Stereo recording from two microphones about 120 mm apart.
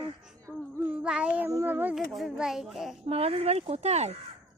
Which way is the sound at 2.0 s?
Centre (ahead or behind).